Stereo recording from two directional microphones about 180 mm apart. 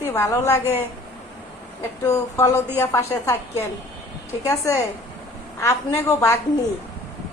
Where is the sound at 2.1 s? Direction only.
15° left (ahead or behind).